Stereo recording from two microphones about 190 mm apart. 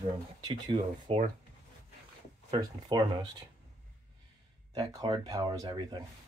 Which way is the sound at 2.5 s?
20° right (ahead or behind).